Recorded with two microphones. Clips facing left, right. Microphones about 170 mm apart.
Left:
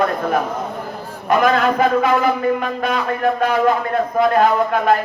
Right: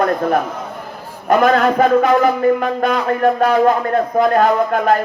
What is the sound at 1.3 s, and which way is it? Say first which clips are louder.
Music: right 3 dB; 45° right (ahead or behind).